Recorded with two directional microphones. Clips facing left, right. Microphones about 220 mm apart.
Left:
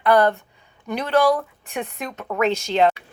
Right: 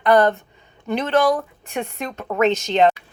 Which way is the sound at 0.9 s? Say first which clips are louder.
Right 3 dB; 10° left (ahead or behind).